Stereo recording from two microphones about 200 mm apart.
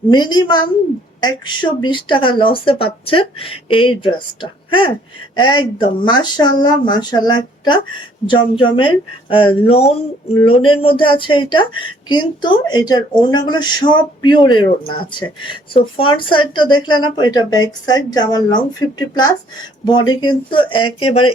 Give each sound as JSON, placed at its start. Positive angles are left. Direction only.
{"t": 0.1, "sound": "speech", "side_deg": 20}